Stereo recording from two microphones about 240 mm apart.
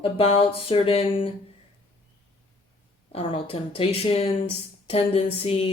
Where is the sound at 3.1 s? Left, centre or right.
Left.